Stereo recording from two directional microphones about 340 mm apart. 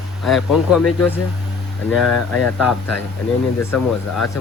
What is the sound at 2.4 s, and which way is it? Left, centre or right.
Speech, left.